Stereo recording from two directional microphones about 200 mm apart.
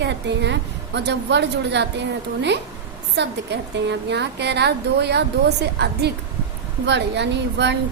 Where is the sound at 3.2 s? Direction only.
60° right (ahead or behind).